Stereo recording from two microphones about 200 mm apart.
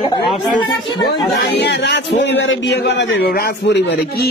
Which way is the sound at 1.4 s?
60° left (ahead or behind).